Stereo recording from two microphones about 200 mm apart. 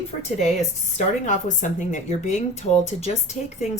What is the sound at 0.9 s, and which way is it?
Speech, 40° left (ahead or behind).